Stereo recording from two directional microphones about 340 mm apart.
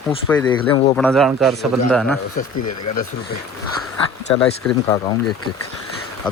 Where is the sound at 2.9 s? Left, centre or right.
Left.